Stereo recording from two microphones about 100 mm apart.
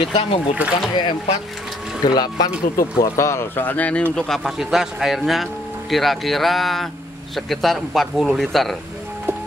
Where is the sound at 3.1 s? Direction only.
25° left (ahead or behind); by 8.8 s centre (ahead or behind).